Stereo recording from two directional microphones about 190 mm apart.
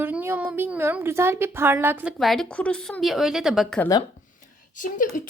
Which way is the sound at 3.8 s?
20° left (ahead or behind).